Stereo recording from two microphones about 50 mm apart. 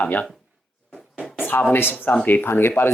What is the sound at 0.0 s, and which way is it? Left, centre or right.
Speech, left.